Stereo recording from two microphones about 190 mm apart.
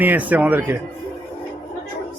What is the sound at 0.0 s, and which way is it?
Speech, 10° right (ahead or behind).